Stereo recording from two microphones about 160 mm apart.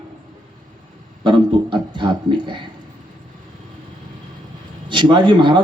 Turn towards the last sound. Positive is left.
turn(degrees=-30)  # may be behind; listen again after turning